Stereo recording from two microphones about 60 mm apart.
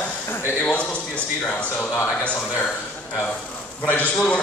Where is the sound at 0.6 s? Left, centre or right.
Left.